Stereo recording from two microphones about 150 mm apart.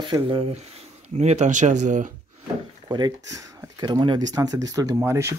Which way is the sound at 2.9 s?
30° right (ahead or behind).